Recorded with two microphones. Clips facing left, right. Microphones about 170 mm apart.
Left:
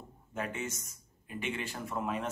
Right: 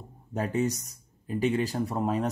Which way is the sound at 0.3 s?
35° right (ahead or behind).